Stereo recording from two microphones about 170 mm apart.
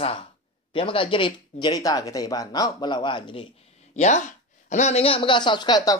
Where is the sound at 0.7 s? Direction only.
30° left (ahead or behind).